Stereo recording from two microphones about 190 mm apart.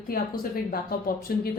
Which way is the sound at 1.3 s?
50° left (ahead or behind).